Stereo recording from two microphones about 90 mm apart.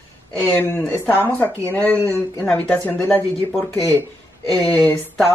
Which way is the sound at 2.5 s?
15° left (ahead or behind).